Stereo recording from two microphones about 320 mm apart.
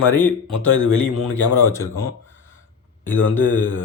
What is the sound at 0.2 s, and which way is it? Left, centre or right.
A man's voice, centre.